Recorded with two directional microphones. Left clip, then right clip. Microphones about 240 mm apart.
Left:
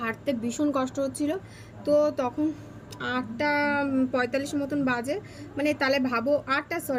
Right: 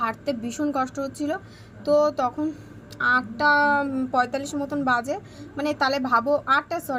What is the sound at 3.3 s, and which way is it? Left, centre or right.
Speech, right.